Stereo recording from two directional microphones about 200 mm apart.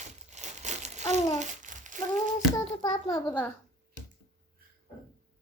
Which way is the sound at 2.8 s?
20° left (ahead or behind).